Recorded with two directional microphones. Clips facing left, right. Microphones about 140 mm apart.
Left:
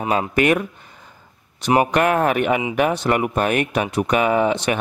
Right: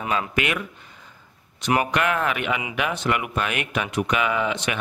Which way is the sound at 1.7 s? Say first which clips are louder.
Left 5 dB; 40° left (ahead or behind).